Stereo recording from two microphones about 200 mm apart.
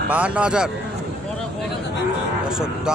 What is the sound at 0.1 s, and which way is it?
Speech, 5° right (ahead or behind).